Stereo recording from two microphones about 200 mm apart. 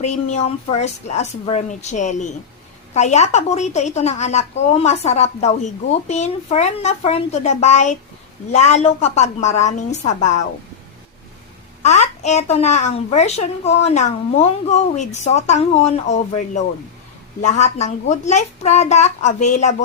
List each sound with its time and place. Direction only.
0.0 s a child's voice: 35° left (ahead or behind)
11.8 s a child's voice: 35° left (ahead or behind)